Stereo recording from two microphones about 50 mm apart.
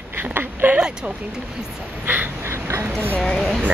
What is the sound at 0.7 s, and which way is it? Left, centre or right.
Speech, centre.